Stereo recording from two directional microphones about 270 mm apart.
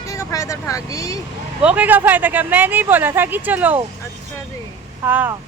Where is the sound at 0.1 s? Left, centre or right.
Centre.